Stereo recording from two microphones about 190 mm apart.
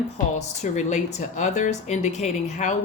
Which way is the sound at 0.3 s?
40° left (ahead or behind).